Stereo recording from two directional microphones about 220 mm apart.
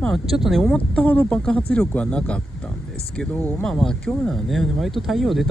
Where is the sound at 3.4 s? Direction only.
5° left (ahead or behind).